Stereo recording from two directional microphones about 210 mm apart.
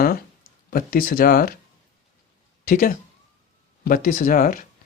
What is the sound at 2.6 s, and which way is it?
Speech, 40° left (ahead or behind).